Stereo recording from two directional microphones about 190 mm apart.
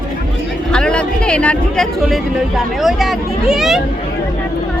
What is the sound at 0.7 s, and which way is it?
Speech, 5° left (ahead or behind).